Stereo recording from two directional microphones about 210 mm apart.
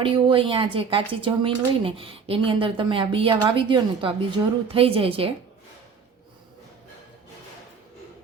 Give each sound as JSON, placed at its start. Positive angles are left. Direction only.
{"t": 0.0, "sound": "a woman's voice", "side_deg": -25}